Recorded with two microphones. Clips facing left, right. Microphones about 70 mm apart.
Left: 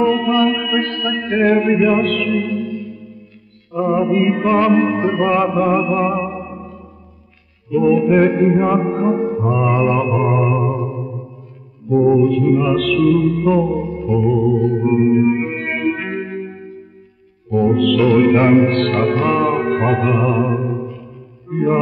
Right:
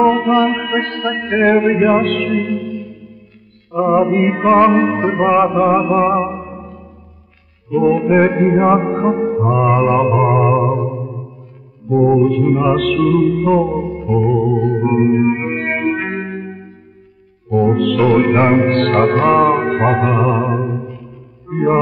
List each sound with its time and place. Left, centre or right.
0.0 s music: right
3.8 s music: right
7.7 s music: right
8.5 s music: right
9.4 s music: right
11.9 s music: centre
12.2 s music: right
13.1 s music: right
17.6 s music: right
18.6 s music: right
21.5 s speech: right